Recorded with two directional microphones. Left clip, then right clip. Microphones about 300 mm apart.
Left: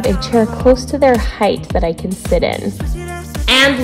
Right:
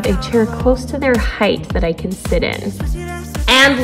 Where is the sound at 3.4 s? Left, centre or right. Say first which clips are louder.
Right 1 dB; centre.